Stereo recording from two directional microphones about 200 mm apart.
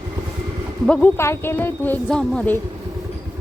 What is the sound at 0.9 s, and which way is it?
Speech, 10° left (ahead or behind).